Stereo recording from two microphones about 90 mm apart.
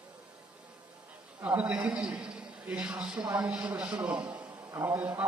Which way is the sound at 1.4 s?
20° right (ahead or behind).